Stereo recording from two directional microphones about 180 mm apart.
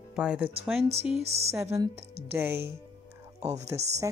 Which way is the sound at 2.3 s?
10° right (ahead or behind).